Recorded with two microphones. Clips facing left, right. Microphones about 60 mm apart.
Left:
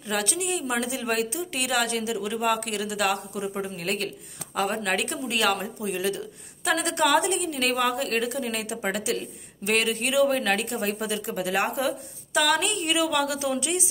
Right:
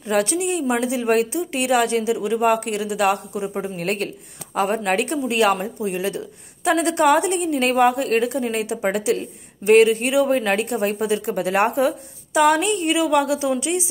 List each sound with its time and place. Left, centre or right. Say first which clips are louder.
0.0 s speech: right 8 dB; right
3.7 s speech: right 5 dB; right
12.4 s a woman's voice: right 7 dB; centre